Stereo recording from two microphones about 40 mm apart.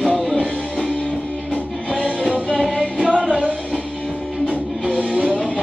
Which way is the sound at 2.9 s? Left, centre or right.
Left.